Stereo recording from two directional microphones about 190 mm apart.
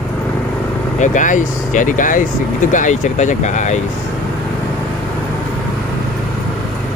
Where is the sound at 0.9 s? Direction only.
40° left (ahead or behind).